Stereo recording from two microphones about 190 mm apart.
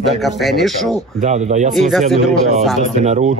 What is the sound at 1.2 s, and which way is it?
Speech, 40° right (ahead or behind).